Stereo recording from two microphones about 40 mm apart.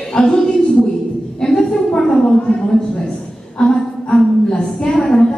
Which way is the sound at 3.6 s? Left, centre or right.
Left.